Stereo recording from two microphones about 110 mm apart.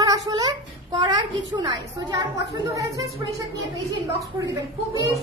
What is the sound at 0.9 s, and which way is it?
A woman's voice, 45° right (ahead or behind).